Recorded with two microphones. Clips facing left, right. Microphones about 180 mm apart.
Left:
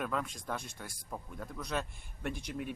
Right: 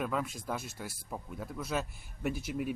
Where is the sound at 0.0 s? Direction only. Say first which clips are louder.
Right 2 dB; 5° right (ahead or behind).